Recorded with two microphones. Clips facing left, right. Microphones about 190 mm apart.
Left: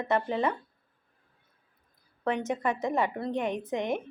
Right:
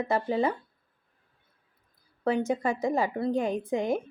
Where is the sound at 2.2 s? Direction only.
30° right (ahead or behind).